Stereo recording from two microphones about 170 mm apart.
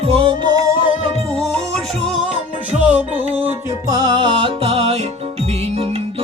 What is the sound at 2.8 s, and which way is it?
Music, 10° right (ahead or behind).